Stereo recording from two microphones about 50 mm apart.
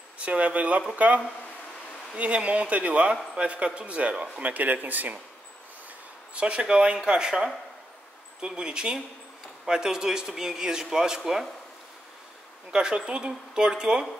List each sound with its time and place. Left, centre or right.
0.2 s speech: right
6.3 s speech: right
12.7 s speech: centre